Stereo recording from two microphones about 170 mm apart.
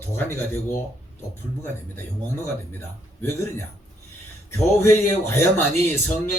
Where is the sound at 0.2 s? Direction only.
15° left (ahead or behind).